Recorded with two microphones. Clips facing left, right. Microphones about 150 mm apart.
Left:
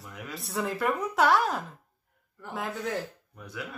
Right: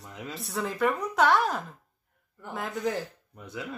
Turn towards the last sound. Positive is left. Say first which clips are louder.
# right 2 dB
turn(degrees=-20)  # may be behind; listen again after turning